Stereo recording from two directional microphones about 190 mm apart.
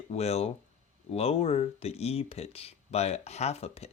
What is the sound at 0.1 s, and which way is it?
Speech, 35° left (ahead or behind).